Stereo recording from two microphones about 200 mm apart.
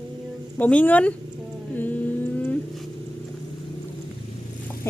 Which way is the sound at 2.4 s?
5° left (ahead or behind).